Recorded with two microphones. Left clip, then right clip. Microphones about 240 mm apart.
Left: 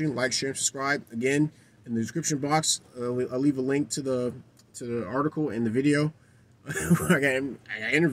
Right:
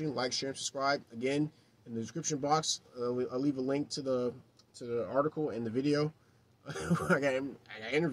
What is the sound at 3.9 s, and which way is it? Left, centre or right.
Speech, right.